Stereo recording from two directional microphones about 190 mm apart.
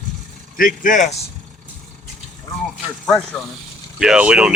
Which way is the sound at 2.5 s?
15° left (ahead or behind).